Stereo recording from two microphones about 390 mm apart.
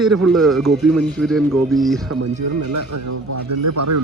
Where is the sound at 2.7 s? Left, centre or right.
Right.